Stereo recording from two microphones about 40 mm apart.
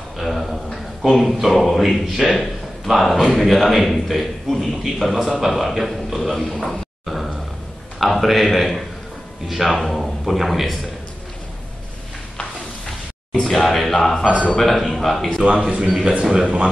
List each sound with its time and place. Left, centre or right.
0.2 s speech: centre
6.4 s a sound: centre
8.0 s speech: centre
12.8 s a sound: centre
14.6 s a man's voice: centre
15.4 s a man's voice: right
16.3 s speech: centre